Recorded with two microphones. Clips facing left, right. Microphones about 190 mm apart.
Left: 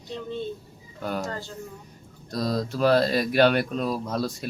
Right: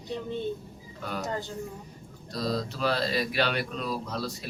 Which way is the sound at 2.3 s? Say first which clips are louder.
Left 4 dB; 45° left (ahead or behind).